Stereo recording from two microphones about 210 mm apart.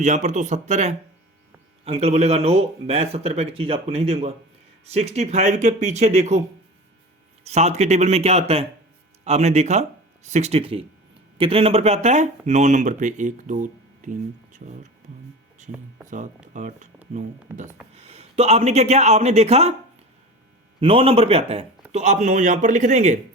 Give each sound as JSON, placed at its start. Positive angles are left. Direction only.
{"t": 0.0, "sound": "speech", "side_deg": -35}
{"t": 7.4, "sound": "speech", "side_deg": -30}
{"t": 16.0, "sound": "speech", "side_deg": -35}
{"t": 17.9, "sound": "speech", "side_deg": -30}
{"t": 20.8, "sound": "speech", "side_deg": -25}